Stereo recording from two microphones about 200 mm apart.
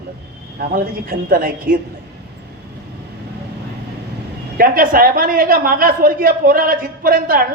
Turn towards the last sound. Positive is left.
turn(degrees=-45)  # may be behind; listen again after turning